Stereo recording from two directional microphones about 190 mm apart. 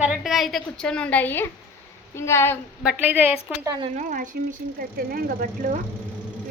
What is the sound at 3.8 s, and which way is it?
A woman's voice, 40° right (ahead or behind).